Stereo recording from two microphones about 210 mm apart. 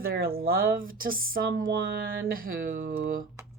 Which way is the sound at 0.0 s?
45° right (ahead or behind).